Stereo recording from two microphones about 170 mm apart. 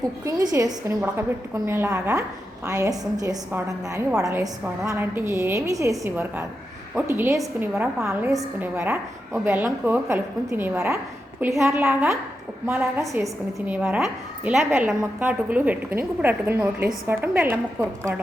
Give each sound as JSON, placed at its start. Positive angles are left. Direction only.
{"t": 0.3, "sound": "a woman's voice", "side_deg": -20}
{"t": 13.1, "sound": "a woman's voice", "side_deg": -10}